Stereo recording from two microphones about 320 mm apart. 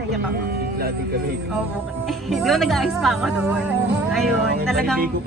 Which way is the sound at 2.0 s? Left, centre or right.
Centre.